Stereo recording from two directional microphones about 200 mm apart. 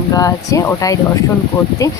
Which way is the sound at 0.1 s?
15° left (ahead or behind).